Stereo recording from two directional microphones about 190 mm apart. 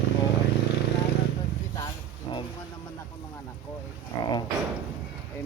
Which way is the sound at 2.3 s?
25° left (ahead or behind).